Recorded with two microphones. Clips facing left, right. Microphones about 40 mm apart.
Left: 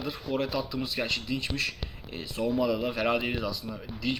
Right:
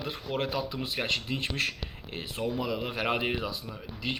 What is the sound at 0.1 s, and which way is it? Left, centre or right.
Speech, right.